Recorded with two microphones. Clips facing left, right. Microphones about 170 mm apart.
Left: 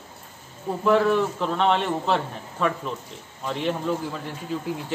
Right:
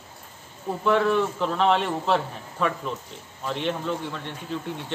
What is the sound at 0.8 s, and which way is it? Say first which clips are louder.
A man's voice: left 2 dB; centre (ahead or behind).